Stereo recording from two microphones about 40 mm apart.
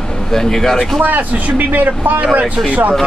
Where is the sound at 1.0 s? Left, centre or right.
Right.